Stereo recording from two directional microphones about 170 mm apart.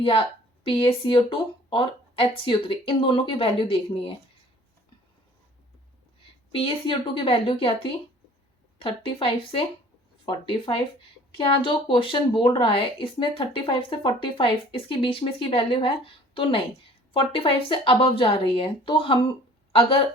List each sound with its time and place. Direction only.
0.0 s a woman's voice: 35° left (ahead or behind)
6.5 s a woman's voice: 30° left (ahead or behind)
11.3 s a woman's voice: 30° left (ahead or behind)